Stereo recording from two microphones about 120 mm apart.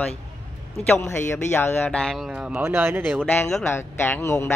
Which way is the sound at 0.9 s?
20° left (ahead or behind).